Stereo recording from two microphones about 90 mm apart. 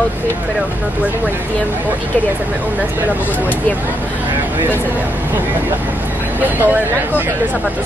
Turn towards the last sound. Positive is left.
turn(degrees=-20)  # may be behind; listen again after turning